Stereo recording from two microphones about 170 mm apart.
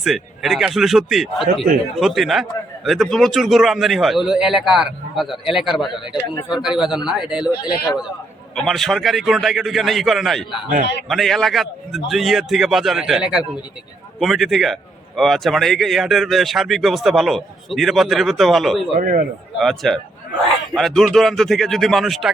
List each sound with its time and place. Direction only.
0.0 s a man's voice: centre (ahead or behind)
8.5 s a man's voice: centre (ahead or behind)
18.9 s a man's voice: 50° right (ahead or behind)
19.5 s a man's voice: centre (ahead or behind)